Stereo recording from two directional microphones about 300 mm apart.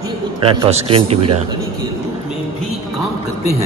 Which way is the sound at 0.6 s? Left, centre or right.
Centre.